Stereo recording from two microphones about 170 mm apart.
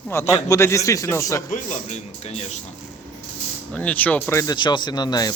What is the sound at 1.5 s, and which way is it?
Speech, 45° left (ahead or behind).